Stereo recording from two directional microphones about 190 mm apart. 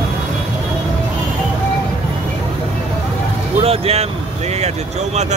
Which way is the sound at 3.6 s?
30° right (ahead or behind).